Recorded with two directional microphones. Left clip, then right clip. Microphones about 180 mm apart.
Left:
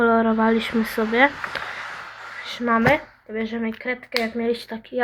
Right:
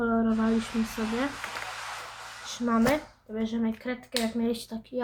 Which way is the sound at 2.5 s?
30° left (ahead or behind).